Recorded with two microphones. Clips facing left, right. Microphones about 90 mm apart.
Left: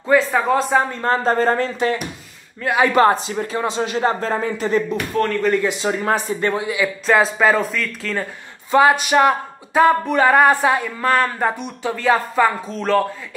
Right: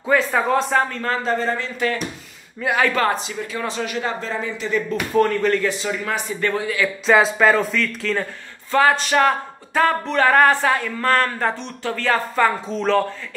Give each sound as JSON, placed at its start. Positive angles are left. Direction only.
{"t": 0.0, "sound": "speech", "side_deg": 0}
{"t": 0.8, "sound": "speech", "side_deg": 20}
{"t": 1.1, "sound": "speech", "side_deg": 40}
{"t": 2.8, "sound": "speech", "side_deg": 20}
{"t": 3.1, "sound": "speech", "side_deg": 35}
{"t": 4.9, "sound": "speech", "side_deg": -10}
{"t": 5.8, "sound": "speech", "side_deg": 35}
{"t": 6.4, "sound": "a sound", "side_deg": 15}
{"t": 7.1, "sound": "speech", "side_deg": 0}
{"t": 8.7, "sound": "a sound", "side_deg": 10}